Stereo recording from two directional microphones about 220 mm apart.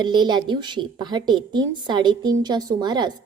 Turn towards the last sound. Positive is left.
turn(degrees=-20)  # may be behind; listen again after turning